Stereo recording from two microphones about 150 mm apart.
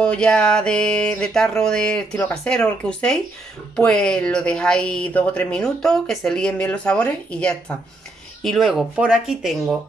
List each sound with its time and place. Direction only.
0.0 s speech: 5° left (ahead or behind)